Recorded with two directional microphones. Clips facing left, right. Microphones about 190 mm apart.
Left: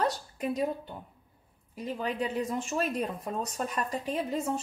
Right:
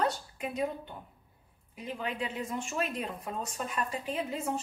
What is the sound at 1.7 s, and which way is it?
Speech, 40° left (ahead or behind).